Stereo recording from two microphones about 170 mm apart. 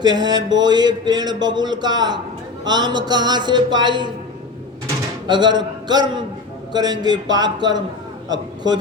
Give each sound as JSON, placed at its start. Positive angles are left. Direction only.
{"t": 0.0, "sound": "music", "side_deg": -25}
{"t": 5.3, "sound": "music", "side_deg": -25}